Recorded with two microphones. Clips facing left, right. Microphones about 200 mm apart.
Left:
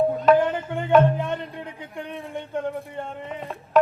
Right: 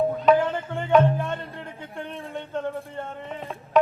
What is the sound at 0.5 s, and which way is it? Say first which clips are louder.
Tabla: left 2 dB; 15° left (ahead or behind).